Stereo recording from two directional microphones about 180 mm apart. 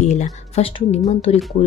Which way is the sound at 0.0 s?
40° left (ahead or behind).